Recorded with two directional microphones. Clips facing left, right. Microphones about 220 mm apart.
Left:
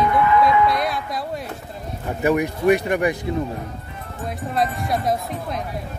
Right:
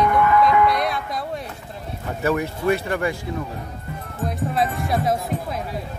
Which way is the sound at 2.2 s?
15° left (ahead or behind).